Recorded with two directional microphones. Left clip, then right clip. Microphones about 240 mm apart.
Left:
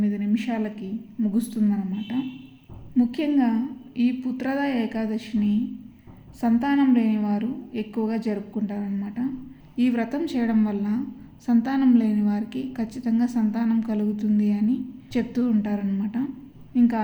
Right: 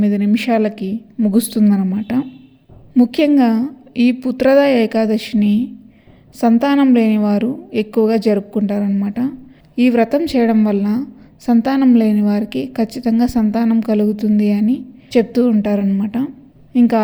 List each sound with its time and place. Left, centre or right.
0.0 s a woman's voice: right